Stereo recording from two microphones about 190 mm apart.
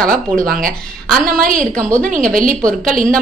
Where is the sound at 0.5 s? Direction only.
50° right (ahead or behind).